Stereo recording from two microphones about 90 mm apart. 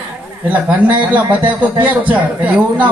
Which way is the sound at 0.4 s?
15° right (ahead or behind).